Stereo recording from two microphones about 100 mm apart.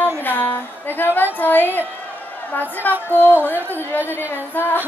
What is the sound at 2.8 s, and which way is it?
Music, 15° left (ahead or behind).